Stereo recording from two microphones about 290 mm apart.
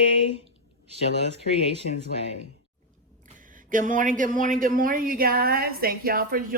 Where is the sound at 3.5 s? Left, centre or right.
Right.